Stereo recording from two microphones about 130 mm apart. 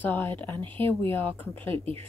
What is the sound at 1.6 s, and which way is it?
Speech, 45° right (ahead or behind).